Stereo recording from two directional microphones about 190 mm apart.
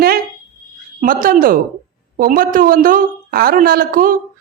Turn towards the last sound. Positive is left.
turn(degrees=-50)  # may be behind; listen again after turning